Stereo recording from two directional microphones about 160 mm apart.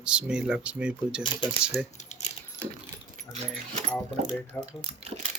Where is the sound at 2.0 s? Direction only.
45° left (ahead or behind).